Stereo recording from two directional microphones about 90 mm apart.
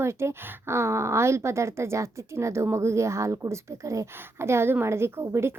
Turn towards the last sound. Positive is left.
turn(degrees=-30)  # may be behind; listen again after turning